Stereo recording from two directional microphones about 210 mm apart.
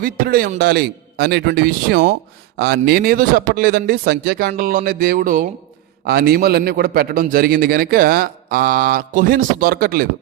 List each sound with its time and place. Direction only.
0.0 s a man's voice: 45° right (ahead or behind)